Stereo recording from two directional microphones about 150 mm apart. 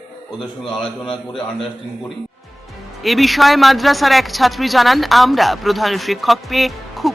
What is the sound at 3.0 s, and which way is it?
Speech, centre (ahead or behind).